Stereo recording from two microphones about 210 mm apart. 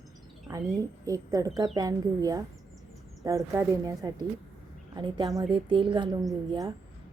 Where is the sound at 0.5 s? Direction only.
15° right (ahead or behind).